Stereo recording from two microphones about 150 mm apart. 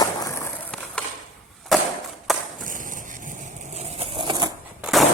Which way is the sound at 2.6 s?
60° right (ahead or behind).